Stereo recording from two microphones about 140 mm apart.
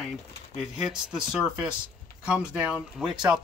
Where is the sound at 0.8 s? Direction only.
5° right (ahead or behind).